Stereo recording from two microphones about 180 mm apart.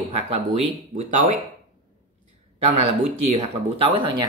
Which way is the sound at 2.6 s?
35° right (ahead or behind).